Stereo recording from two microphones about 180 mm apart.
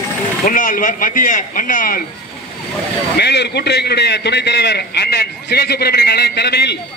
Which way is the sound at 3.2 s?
65° left (ahead or behind).